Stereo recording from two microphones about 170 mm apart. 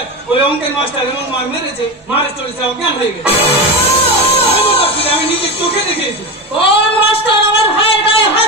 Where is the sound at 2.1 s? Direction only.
35° left (ahead or behind).